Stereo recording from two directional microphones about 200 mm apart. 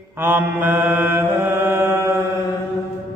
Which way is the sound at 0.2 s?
10° right (ahead or behind).